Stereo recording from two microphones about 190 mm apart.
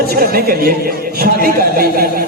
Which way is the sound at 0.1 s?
55° right (ahead or behind).